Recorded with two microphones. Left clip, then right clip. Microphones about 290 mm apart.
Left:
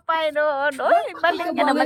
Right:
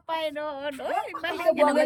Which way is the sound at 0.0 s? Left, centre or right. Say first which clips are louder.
Left 9 dB; centre.